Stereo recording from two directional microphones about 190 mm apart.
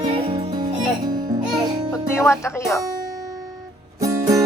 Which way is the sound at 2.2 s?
15° left (ahead or behind).